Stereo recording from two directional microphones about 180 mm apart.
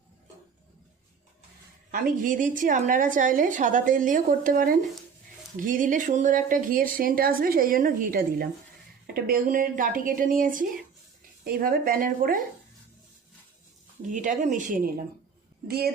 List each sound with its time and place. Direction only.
1.9 s a woman's voice: 50° right (ahead or behind)
14.1 s a woman's voice: 45° right (ahead or behind)
15.6 s speech: 60° right (ahead or behind)